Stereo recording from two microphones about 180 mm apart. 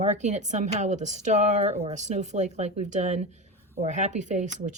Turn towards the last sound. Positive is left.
turn(degrees=-40)  # may be behind; listen again after turning